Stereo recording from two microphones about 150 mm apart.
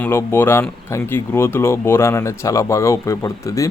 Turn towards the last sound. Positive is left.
turn(degrees=20)  # may be behind; listen again after turning